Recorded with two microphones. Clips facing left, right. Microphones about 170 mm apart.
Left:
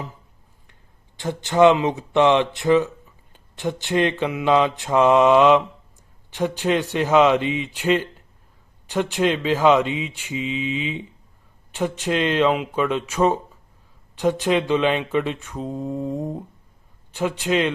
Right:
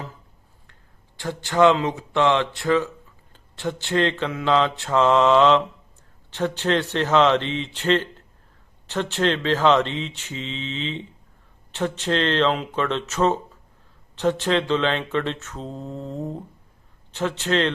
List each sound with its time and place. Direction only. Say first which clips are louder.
0.7 s speech: even; 20° left (ahead or behind)
3.3 s mantra: left 2 dB; 15° left (ahead or behind)